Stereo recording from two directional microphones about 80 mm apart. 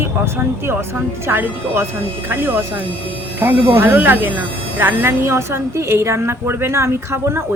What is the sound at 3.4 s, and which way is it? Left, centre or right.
Speech, right.